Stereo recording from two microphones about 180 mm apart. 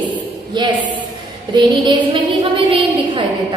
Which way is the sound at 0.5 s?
25° right (ahead or behind).